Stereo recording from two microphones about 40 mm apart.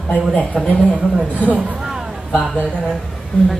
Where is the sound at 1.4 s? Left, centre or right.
Right.